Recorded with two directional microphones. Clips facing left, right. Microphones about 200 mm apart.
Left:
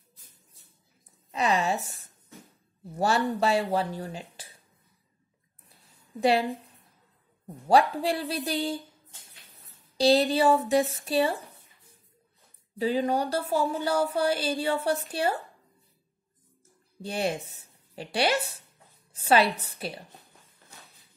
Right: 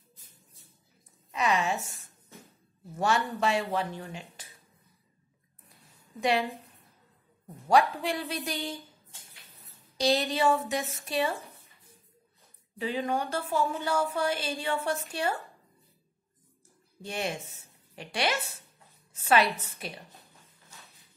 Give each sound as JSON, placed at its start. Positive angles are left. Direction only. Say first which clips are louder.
{"t": 1.3, "sound": "a sound", "louder": "left 2 dB", "side_deg": 35}
{"t": 3.0, "sound": "a woman's voice", "louder": "left 3 dB", "side_deg": 35}
{"t": 8.0, "sound": "a woman's voice", "louder": "left 4 dB", "side_deg": 35}
{"t": 9.9, "sound": "a woman's voice", "louder": "left 5 dB", "side_deg": 35}
{"t": 12.7, "sound": "a woman's voice", "louder": "left 5 dB", "side_deg": 35}
{"t": 17.0, "sound": "a woman's voice", "louder": "left 4 dB", "side_deg": 35}